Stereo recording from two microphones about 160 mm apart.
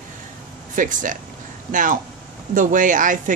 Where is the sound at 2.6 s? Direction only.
55° right (ahead or behind).